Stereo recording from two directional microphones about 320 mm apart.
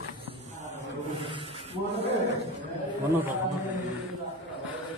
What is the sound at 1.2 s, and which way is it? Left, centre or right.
Rub, centre.